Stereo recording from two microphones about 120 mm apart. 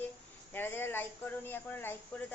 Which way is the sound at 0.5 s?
15° left (ahead or behind).